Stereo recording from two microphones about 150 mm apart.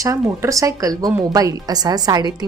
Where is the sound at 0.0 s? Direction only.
20° right (ahead or behind).